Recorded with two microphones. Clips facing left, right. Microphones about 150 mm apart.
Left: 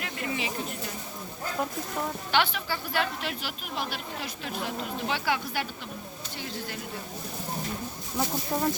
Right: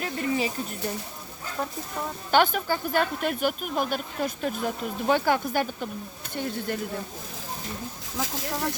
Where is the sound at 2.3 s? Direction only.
45° right (ahead or behind).